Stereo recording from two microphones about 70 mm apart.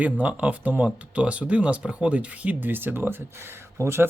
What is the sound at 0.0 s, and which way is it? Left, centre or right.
Speech, right.